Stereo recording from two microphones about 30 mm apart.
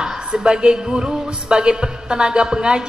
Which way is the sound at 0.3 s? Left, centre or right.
Right.